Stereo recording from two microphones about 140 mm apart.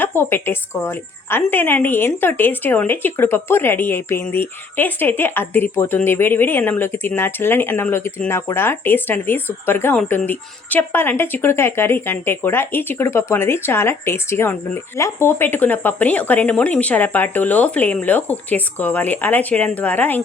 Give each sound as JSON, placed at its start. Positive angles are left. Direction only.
{"t": 0.0, "sound": "a woman's voice", "side_deg": 15}